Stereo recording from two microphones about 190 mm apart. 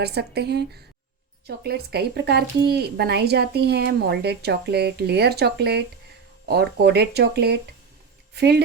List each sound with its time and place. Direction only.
0.0 s speech: 60° right (ahead or behind)